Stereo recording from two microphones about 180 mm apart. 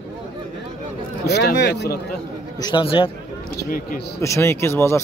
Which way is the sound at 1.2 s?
65° left (ahead or behind).